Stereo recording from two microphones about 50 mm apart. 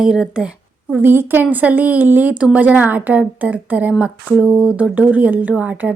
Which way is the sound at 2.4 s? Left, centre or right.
Right.